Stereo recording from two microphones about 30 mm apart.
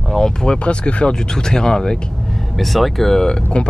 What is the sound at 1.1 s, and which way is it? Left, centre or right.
Speech, left.